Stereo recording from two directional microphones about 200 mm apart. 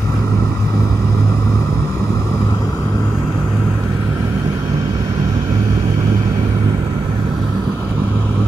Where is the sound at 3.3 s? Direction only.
10° right (ahead or behind).